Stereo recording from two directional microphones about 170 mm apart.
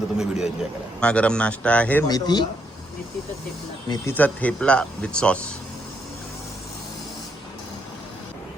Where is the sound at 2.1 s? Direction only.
25° left (ahead or behind).